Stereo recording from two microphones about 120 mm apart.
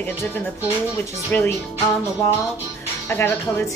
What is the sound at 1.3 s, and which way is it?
Speech, 20° left (ahead or behind).